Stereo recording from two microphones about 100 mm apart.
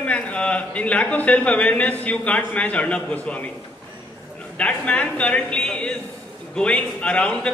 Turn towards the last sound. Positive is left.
turn(degrees=10)  # may be behind; listen again after turning